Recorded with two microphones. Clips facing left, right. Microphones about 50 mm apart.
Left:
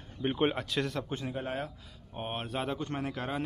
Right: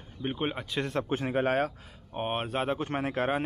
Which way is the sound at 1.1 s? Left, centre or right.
Right.